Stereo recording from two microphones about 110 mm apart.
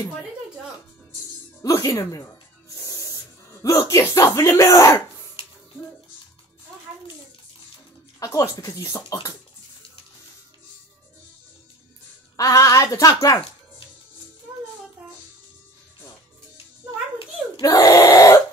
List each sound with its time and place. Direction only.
1.6 s speech: 30° left (ahead or behind)
8.2 s speech: 30° left (ahead or behind)
12.4 s speech: 30° left (ahead or behind)
17.6 s speech: 35° left (ahead or behind)